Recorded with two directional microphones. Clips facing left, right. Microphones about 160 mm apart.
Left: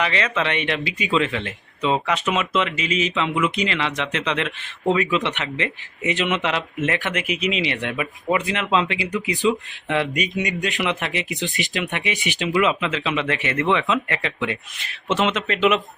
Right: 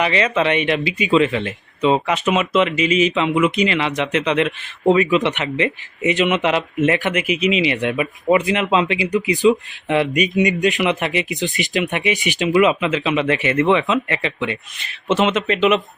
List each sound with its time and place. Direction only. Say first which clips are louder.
0.0 s speech: right 5 dB; 10° right (ahead or behind)